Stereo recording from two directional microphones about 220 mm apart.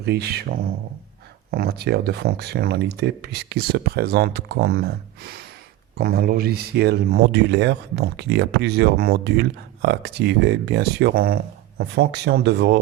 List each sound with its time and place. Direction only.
0.0 s speech: 45° right (ahead or behind)